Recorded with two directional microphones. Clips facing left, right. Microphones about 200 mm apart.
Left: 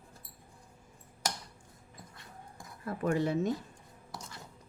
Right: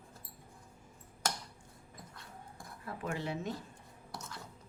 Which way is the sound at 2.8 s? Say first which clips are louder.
Left 8 dB; 45° left (ahead or behind).